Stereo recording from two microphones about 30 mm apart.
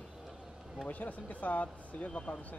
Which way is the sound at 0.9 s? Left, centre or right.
Left.